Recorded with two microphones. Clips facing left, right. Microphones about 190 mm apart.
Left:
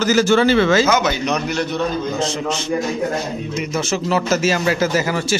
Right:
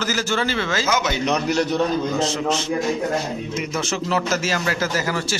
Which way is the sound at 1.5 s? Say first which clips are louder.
Right 2 dB; 40° right (ahead or behind).